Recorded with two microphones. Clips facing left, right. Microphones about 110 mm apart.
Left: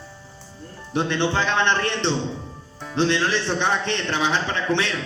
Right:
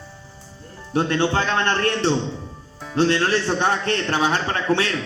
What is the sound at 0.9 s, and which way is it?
Speech, 50° right (ahead or behind).